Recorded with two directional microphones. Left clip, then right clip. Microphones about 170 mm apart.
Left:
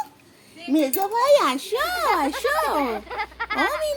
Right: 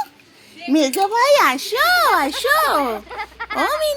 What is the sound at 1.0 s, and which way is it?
Speech, 45° right (ahead or behind).